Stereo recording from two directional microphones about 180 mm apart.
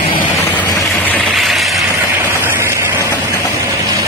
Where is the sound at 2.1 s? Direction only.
10° right (ahead or behind).